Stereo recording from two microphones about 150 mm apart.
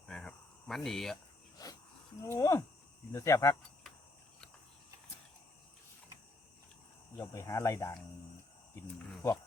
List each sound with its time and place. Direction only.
0.1 s cricket: 5° left (ahead or behind)
1.6 s a sound: 25° left (ahead or behind)
2.2 s speech: 20° left (ahead or behind)
7.2 s speech: 20° left (ahead or behind)
9.2 s speech: 20° left (ahead or behind)